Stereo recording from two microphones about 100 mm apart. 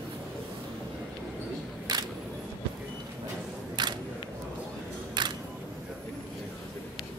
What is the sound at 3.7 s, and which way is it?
Single-lens reflex camera, 45° right (ahead or behind).